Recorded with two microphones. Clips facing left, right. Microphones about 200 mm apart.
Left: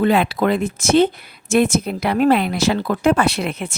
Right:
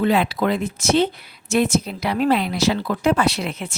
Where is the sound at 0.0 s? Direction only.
55° left (ahead or behind).